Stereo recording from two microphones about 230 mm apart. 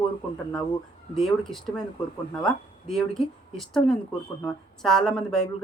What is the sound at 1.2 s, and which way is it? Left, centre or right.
Speech, centre.